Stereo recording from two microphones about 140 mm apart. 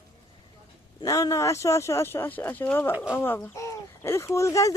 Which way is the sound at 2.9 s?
10° right (ahead or behind).